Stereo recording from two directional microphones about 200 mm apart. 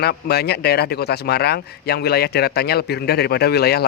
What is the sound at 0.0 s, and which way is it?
A man's voice, 55° left (ahead or behind).